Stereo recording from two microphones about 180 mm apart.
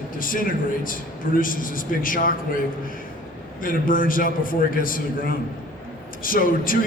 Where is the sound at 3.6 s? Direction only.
50° left (ahead or behind).